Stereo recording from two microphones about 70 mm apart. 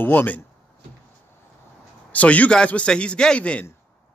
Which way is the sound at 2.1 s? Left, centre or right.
Left.